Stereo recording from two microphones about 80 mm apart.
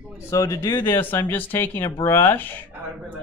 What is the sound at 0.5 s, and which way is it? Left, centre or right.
Speech, left.